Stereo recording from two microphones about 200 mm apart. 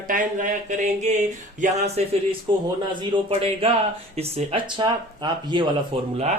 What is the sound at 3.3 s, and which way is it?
Speech, 30° right (ahead or behind).